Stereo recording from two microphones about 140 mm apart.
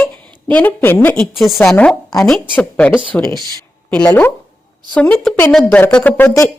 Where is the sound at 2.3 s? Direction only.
10° left (ahead or behind).